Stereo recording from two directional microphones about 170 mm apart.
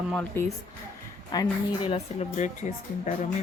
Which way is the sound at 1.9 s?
40° left (ahead or behind).